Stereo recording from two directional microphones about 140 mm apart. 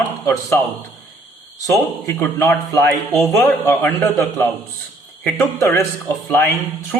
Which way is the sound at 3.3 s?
20° left (ahead or behind).